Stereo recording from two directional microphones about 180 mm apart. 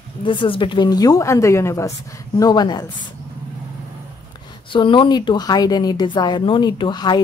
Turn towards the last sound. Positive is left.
turn(degrees=25)  # may be behind; listen again after turning